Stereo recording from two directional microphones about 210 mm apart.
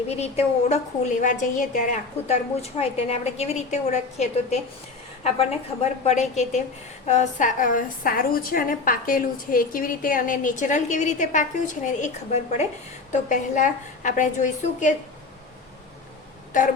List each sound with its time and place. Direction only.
0.1 s a woman's voice: 30° left (ahead or behind)